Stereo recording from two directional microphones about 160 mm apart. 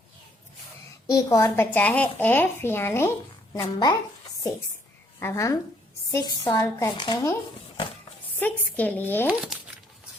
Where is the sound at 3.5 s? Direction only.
25° left (ahead or behind).